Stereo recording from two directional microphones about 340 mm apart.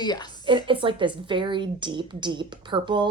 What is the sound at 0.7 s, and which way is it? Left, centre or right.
A woman's voice, centre.